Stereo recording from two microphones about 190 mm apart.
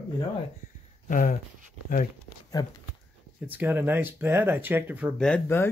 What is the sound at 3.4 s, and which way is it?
Speech, 10° right (ahead or behind).